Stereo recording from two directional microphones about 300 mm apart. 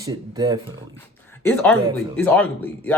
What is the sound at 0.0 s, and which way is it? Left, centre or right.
Speech, centre.